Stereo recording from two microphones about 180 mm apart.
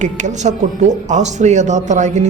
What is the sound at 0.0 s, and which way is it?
Speech, 40° right (ahead or behind).